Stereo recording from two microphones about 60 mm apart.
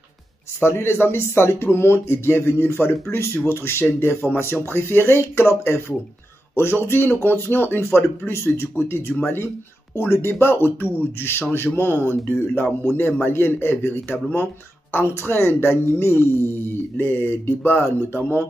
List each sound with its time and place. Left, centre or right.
0.6 s speech: left